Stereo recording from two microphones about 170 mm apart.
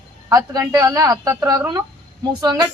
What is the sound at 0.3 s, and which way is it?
A woman's voice, 20° right (ahead or behind).